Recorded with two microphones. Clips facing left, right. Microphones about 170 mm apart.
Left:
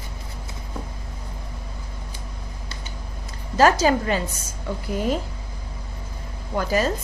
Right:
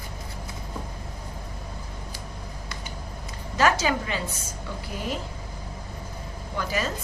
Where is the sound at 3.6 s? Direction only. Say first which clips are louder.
Left 6 dB; 40° left (ahead or behind).